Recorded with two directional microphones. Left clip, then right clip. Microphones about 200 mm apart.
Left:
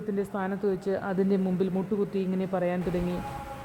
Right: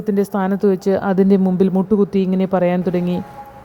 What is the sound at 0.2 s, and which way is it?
Speech, 35° right (ahead or behind).